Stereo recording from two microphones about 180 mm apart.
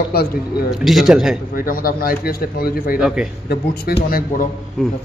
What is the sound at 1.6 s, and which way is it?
A man's voice, 55° left (ahead or behind).